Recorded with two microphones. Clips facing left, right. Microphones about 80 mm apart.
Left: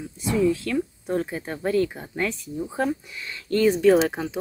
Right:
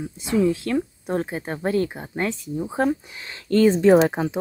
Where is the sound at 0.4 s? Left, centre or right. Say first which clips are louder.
Right 2 dB; right.